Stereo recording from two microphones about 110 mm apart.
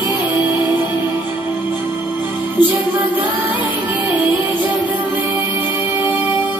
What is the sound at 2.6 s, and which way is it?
Music, 40° left (ahead or behind).